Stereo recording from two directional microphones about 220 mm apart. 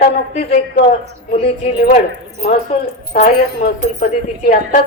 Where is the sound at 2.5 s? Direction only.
30° left (ahead or behind).